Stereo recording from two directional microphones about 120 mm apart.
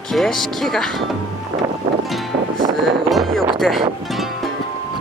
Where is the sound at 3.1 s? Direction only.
Centre (ahead or behind).